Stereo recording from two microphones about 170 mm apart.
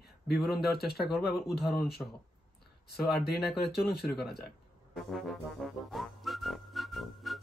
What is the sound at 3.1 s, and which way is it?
Speech, 65° left (ahead or behind).